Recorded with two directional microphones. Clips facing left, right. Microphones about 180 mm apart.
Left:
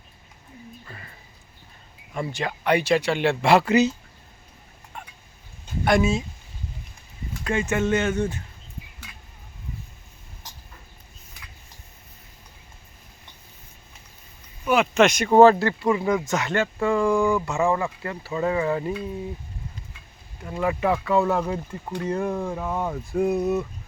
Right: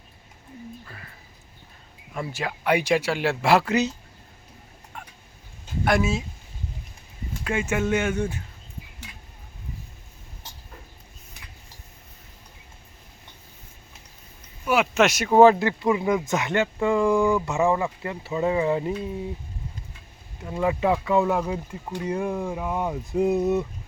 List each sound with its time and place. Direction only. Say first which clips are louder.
0.9 s speech: left 1 dB; centre (ahead or behind)
2.1 s speech: left 2 dB; 5° right (ahead or behind)
4.9 s fowl: left 1 dB; centre (ahead or behind)
5.8 s speech: left 2 dB; 5° right (ahead or behind)
7.4 s speech: left 1 dB; 10° right (ahead or behind)
14.6 s speech: left 2 dB; 5° right (ahead or behind)
20.4 s speech: right 1 dB; 20° right (ahead or behind)